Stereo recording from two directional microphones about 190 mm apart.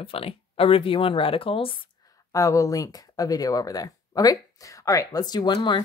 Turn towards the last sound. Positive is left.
turn(degrees=25)  # may be behind; listen again after turning